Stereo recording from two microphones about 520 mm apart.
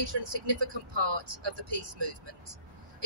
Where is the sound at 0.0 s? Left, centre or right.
Right.